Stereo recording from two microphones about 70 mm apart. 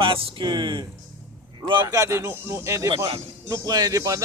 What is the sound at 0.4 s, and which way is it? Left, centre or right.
A man's voice, right.